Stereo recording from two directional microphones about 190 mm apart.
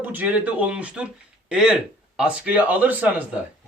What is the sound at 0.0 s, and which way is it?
Speech, 10° right (ahead or behind).